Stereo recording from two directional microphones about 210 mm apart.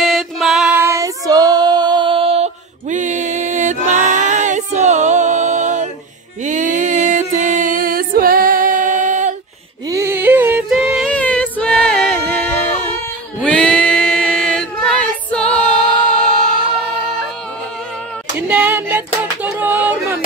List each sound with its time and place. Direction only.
0.0 s female singing: centre (ahead or behind); by 3.7 s 35° right (ahead or behind)
3.9 s music: 35° right (ahead or behind)
9.8 s yodeling: 15° right (ahead or behind); by 12.5 s 5° left (ahead or behind)
13.4 s female singing: 5° left (ahead or behind)
18.5 s a sound: 10° right (ahead or behind)